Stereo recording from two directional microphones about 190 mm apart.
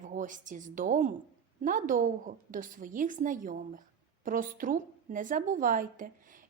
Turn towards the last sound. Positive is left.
turn(degrees=-45)  # may be behind; listen again after turning